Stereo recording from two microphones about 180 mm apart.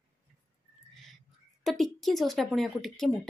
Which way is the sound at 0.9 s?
Centre (ahead or behind).